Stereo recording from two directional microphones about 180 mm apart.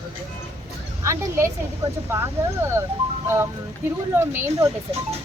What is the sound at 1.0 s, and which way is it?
Speech, 15° right (ahead or behind).